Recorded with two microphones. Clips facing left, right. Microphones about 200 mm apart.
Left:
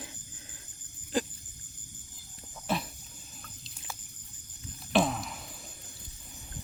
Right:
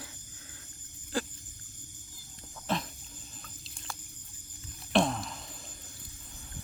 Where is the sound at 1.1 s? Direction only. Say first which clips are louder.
Left 3 dB; 20° left (ahead or behind).